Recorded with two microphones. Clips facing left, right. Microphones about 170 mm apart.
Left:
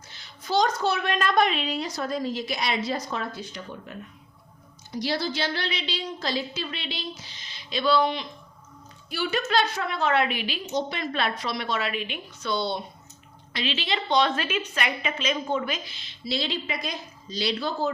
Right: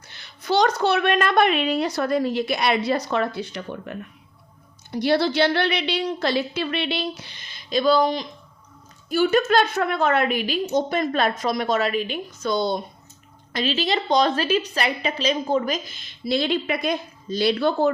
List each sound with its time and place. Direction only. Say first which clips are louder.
0.1 s a woman's voice: right 4 dB; 65° right (ahead or behind)